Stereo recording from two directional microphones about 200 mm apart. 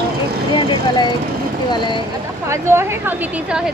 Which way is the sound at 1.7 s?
20° left (ahead or behind).